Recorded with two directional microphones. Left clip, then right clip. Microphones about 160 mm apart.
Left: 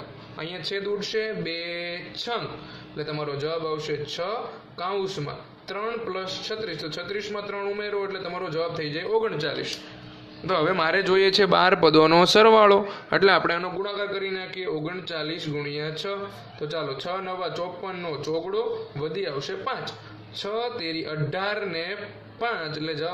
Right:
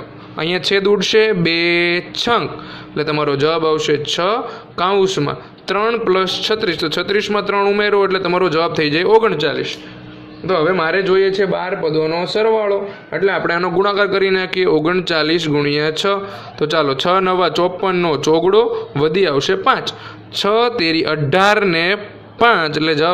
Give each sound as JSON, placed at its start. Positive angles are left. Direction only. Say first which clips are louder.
{"t": 0.6, "sound": "a man's voice", "louder": "right 14 dB", "side_deg": -60}
{"t": 9.4, "sound": "a man's voice", "louder": "right 11 dB", "side_deg": -30}
{"t": 10.4, "sound": "a man's voice", "louder": "right 7 dB", "side_deg": -5}
{"t": 11.1, "sound": "a man's voice", "louder": "right 5 dB", "side_deg": 10}
{"t": 11.5, "sound": "a man's voice", "louder": "left 1 dB", "side_deg": 30}
{"t": 13.8, "sound": "a man's voice", "louder": "right 14 dB", "side_deg": -50}